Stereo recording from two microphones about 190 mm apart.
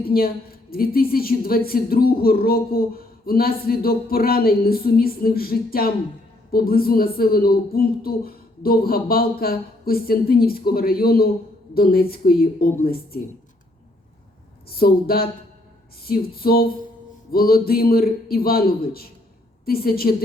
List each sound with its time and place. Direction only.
0.0 s a woman's voice: 50° left (ahead or behind)
14.7 s a woman's voice: 50° left (ahead or behind)